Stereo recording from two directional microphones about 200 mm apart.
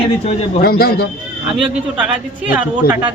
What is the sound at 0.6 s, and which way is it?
Speech, 50° left (ahead or behind).